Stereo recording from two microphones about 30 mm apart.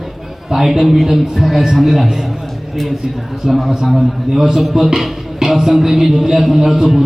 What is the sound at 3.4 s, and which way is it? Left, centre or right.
A man's voice, centre.